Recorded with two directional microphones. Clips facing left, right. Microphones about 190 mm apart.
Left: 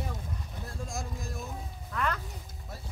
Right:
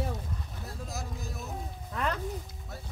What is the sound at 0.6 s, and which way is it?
Speech, 5° right (ahead or behind).